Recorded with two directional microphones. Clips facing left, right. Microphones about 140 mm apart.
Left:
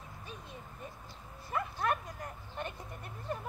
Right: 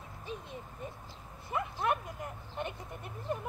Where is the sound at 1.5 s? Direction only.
20° right (ahead or behind).